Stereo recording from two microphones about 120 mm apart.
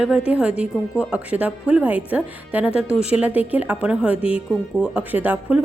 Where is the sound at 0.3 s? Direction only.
10° right (ahead or behind).